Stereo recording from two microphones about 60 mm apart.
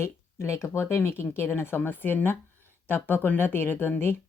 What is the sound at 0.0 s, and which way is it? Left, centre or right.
A woman's voice, left.